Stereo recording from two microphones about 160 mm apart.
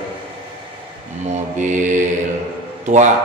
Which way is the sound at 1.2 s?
45° right (ahead or behind).